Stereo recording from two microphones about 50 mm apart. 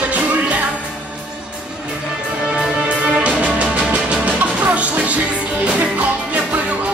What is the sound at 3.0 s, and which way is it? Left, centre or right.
Music, right.